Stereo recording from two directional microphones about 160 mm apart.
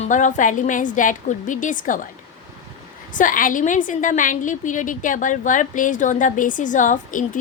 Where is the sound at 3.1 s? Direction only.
55° left (ahead or behind).